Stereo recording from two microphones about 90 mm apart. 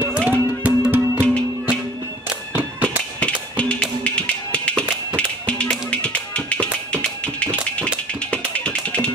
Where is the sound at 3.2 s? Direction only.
15° left (ahead or behind).